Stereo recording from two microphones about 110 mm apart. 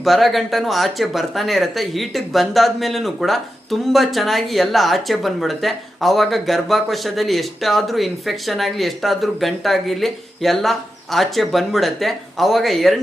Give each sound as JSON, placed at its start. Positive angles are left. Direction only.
{"t": 0.0, "sound": "speech", "side_deg": 0}